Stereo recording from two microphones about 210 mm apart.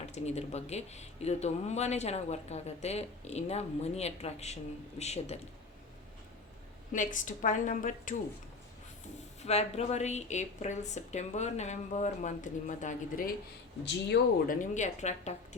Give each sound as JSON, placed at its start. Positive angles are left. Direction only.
{"t": 0.0, "sound": "speech", "side_deg": 30}
{"t": 6.9, "sound": "speech", "side_deg": 35}
{"t": 9.4, "sound": "speech", "side_deg": 30}
{"t": 14.4, "sound": "speech", "side_deg": 40}